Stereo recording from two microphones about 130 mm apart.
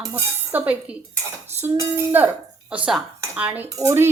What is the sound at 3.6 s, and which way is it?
Speech, 25° right (ahead or behind).